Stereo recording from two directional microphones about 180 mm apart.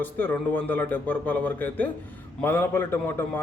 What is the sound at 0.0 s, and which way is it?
A man's voice, 10° left (ahead or behind).